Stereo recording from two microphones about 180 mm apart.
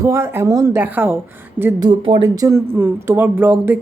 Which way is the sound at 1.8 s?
25° right (ahead or behind).